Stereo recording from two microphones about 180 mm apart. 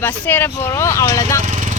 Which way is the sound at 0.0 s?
10° left (ahead or behind).